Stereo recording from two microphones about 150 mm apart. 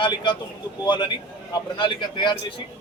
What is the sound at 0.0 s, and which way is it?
A man's voice, 30° left (ahead or behind).